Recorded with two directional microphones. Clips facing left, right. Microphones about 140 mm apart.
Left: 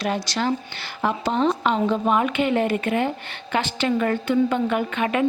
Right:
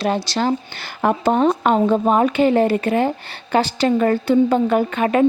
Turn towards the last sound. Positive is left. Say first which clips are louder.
# right 6 dB
turn(degrees=-40)  # may be behind; listen again after turning